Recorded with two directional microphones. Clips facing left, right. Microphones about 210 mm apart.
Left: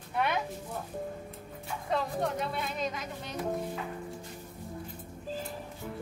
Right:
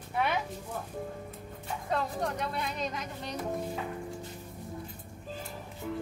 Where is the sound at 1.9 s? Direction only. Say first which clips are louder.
Left 1 dB; centre (ahead or behind).